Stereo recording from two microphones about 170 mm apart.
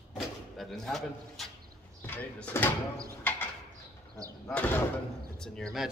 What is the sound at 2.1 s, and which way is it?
Speech, 10° left (ahead or behind).